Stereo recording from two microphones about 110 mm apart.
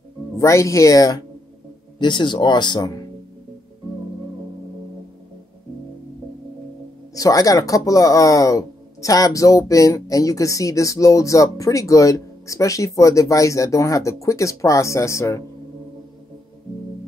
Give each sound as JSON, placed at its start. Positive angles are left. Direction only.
{"t": 0.4, "sound": "speech", "side_deg": 30}
{"t": 7.2, "sound": "speech", "side_deg": 30}